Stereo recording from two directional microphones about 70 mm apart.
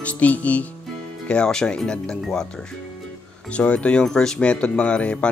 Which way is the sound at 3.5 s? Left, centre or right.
Centre.